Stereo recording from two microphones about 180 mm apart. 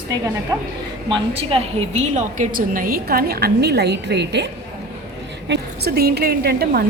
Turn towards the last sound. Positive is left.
turn(degrees=-60)  # may be behind; listen again after turning